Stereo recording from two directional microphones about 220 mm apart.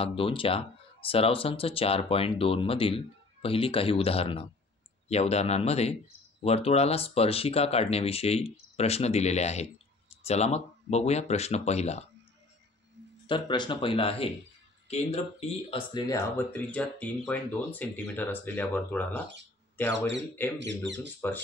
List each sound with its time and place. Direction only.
0.0 s speech: 25° left (ahead or behind)
13.3 s speech: 20° left (ahead or behind)
16.3 s speech: 5° left (ahead or behind)
20.8 s speech: 55° right (ahead or behind)